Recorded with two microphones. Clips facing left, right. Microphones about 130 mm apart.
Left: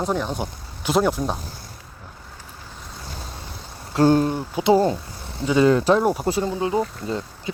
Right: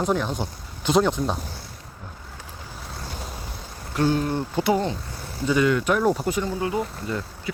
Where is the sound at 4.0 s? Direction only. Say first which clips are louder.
Left 5 dB; 30° left (ahead or behind).